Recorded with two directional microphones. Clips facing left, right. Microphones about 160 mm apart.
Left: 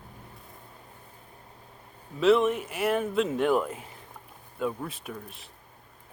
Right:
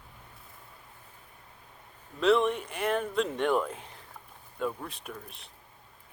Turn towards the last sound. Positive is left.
turn(degrees=0)  # may be behind; listen again after turning